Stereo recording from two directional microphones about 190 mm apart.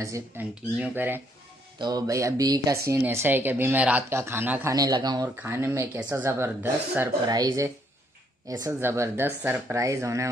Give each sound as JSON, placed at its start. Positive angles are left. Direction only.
{"t": 0.0, "sound": "speech", "side_deg": -10}
{"t": 1.8, "sound": "speech", "side_deg": -20}
{"t": 4.7, "sound": "speech", "side_deg": -20}